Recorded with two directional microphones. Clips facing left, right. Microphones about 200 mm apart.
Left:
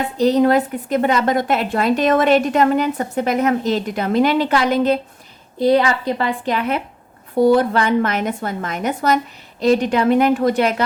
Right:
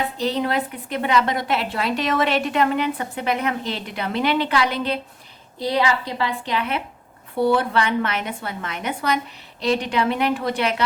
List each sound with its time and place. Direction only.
0.2 s a woman's voice: 45° left (ahead or behind)